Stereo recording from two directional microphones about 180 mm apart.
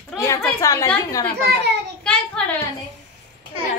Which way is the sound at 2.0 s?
5° left (ahead or behind).